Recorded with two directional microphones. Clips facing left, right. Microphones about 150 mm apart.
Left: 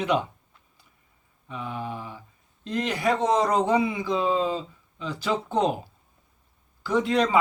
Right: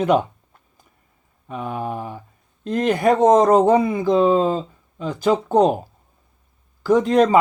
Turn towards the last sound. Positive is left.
turn(degrees=-45)  # may be behind; listen again after turning